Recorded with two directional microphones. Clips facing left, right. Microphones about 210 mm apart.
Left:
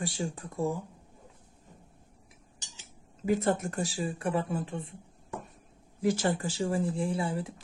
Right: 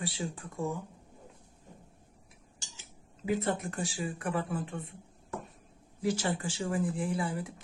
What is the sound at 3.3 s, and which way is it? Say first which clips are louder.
Speech: left 4 dB; 45° left (ahead or behind).